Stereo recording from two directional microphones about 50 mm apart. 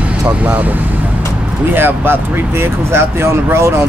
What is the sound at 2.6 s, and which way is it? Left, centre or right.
Speech, right.